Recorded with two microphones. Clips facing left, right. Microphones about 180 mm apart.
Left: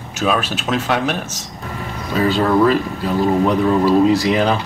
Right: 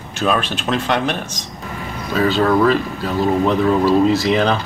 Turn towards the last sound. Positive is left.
turn(degrees=10)  # may be behind; listen again after turning